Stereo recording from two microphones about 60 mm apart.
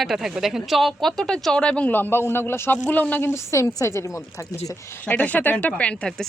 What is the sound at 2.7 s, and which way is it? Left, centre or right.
Speech, left.